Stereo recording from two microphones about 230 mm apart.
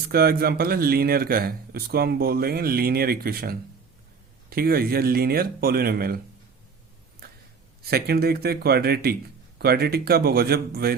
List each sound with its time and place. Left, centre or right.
0.1 s speech: right
7.8 s speech: right